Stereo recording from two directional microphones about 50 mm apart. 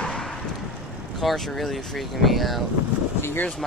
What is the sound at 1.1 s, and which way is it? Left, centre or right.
Speech, centre.